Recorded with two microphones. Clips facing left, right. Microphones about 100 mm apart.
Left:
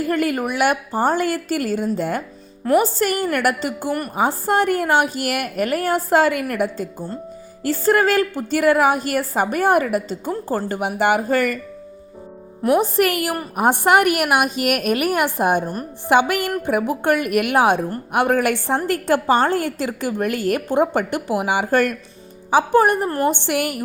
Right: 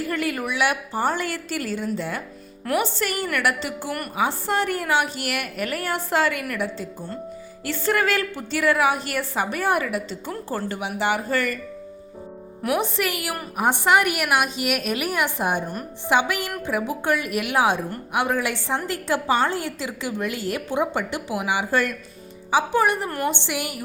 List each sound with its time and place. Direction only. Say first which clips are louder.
0.1 s a woman's voice: left 6 dB; 45° left (ahead or behind)
12.6 s speech: left 6 dB; 30° left (ahead or behind)
13.0 s a woman's voice: left 7 dB; 50° left (ahead or behind)
15.6 s speech: left 4 dB; 35° left (ahead or behind)
16.0 s a woman's voice: left 5 dB; 55° left (ahead or behind)